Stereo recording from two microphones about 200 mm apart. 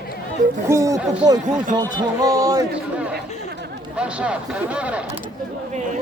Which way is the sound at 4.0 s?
5° right (ahead or behind).